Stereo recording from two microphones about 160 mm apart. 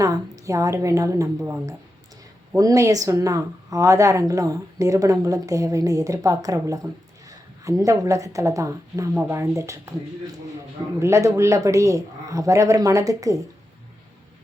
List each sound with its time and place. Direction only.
0.0 s a woman's voice: 20° right (ahead or behind)
11.0 s a woman's voice: 20° right (ahead or behind)